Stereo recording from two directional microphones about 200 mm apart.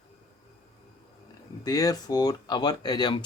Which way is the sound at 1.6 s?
20° left (ahead or behind).